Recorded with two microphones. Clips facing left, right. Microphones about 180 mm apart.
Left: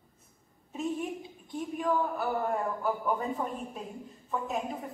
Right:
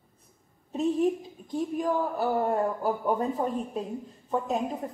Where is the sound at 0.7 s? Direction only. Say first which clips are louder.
Right 8 dB; 40° right (ahead or behind).